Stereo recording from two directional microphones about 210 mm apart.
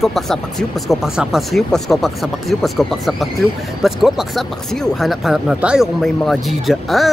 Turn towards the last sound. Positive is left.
turn(degrees=0)  # may be behind; listen again after turning